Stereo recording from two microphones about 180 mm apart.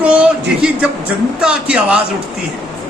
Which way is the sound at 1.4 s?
5° right (ahead or behind).